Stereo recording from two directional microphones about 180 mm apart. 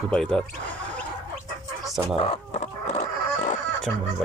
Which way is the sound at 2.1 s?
30° left (ahead or behind).